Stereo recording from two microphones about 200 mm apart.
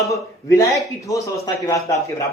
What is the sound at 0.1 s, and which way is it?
Speech, 15° left (ahead or behind).